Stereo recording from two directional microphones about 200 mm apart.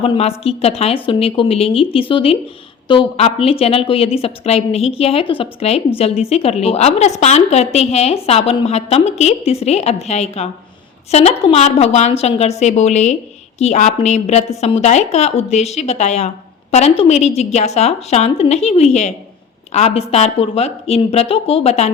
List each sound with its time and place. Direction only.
0.0 s a woman's voice: 30° left (ahead or behind)